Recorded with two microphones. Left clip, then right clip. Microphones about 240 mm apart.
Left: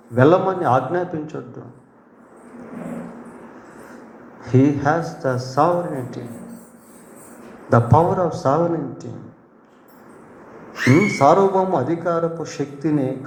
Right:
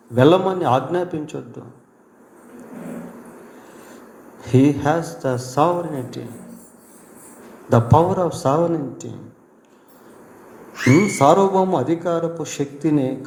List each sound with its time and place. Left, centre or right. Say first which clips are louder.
0.1 s a man's voice: even; right
4.4 s a man's voice: right 1 dB; right
7.7 s a man's voice: even; right
10.8 s a man's voice: even; right